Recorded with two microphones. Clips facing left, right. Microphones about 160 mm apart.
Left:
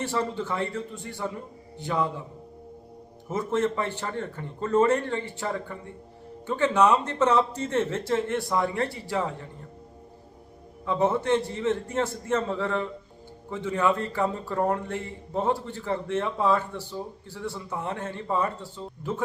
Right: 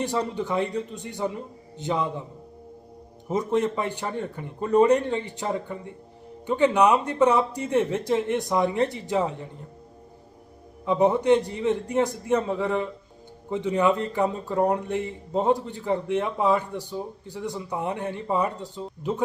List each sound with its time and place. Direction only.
0.0 s a man's voice: 15° right (ahead or behind)
3.2 s speech: 15° right (ahead or behind)
10.8 s speech: 15° right (ahead or behind)